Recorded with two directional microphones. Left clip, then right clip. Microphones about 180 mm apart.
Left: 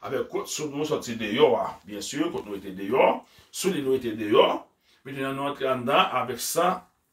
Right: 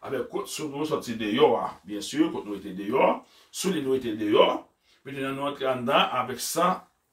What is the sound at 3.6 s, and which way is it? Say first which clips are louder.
Speech: left 1 dB; 10° left (ahead or behind).